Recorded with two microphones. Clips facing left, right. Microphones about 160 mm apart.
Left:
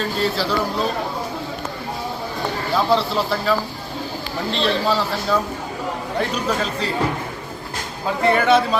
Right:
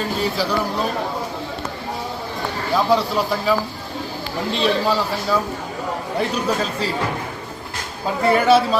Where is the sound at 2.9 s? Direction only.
10° right (ahead or behind).